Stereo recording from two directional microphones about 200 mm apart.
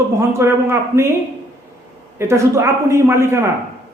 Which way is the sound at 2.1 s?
15° right (ahead or behind).